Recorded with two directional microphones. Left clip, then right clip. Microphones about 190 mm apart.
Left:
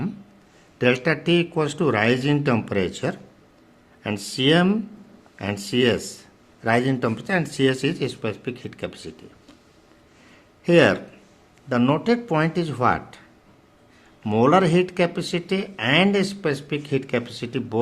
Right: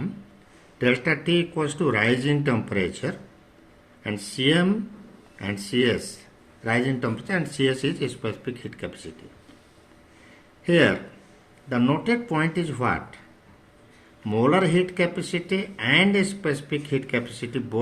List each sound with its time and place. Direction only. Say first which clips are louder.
0.8 s speech: left 2 dB; 35° left (ahead or behind)
10.7 s speech: left 3 dB; 40° left (ahead or behind)
14.3 s speech: left 3 dB; 40° left (ahead or behind)